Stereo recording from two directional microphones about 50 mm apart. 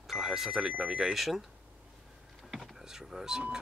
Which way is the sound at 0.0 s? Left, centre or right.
Centre.